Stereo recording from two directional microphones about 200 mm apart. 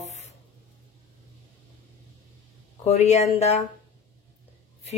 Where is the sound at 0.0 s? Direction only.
35° left (ahead or behind).